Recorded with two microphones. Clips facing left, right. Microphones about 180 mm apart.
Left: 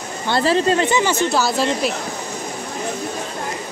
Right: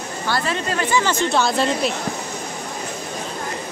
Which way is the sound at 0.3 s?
30° left (ahead or behind).